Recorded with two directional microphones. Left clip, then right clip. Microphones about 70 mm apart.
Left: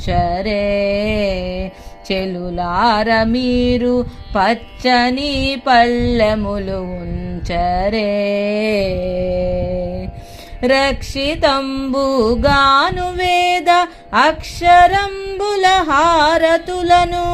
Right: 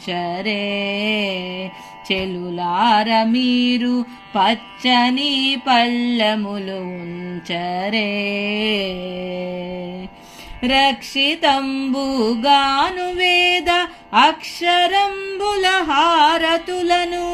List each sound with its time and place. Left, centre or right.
0.1 s a sound: left
2.0 s music: left
2.8 s a sound: left
4.4 s speech: left
5.4 s music: left
7.5 s a sound: left
10.6 s speech: left
11.6 s music: left
14.8 s speech: left
15.4 s a sound: left
15.9 s speech: left
16.1 s music: left